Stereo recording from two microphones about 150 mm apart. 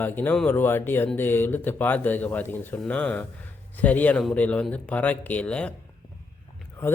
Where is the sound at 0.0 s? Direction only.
10° left (ahead or behind).